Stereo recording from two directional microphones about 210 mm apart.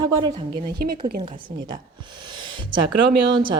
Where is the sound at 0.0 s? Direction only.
20° right (ahead or behind).